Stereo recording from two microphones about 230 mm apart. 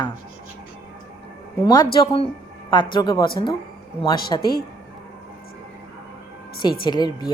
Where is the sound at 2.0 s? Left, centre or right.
Left.